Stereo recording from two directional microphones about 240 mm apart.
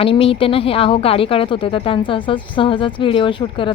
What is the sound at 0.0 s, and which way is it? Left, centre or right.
Speech, left.